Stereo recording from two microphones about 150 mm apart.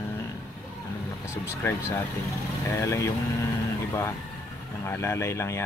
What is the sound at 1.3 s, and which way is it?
Speech, 20° left (ahead or behind).